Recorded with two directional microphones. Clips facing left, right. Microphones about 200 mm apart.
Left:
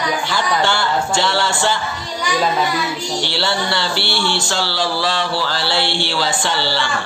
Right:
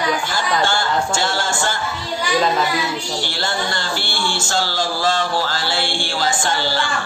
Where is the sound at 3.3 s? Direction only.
45° right (ahead or behind).